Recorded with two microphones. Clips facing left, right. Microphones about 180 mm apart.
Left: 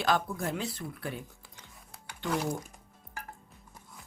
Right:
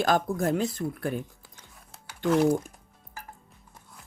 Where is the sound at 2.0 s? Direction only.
Centre (ahead or behind).